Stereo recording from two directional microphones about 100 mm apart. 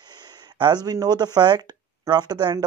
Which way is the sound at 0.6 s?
45° right (ahead or behind).